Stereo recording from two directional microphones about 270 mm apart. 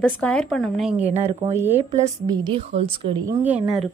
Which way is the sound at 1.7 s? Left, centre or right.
Right.